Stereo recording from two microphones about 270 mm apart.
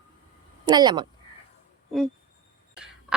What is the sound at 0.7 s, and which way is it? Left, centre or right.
Speech, centre.